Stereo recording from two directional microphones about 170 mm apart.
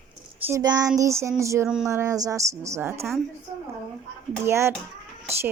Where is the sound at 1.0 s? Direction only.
15° right (ahead or behind).